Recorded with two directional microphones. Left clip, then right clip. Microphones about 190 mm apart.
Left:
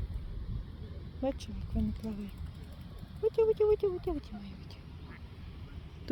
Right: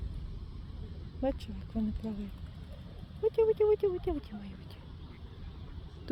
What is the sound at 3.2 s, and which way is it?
Speech, centre (ahead or behind).